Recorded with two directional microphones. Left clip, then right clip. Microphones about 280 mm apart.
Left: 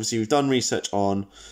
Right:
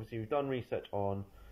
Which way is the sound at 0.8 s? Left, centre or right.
Left.